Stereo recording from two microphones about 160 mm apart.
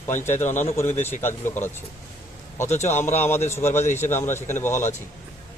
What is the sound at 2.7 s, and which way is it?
Speech, 45° left (ahead or behind).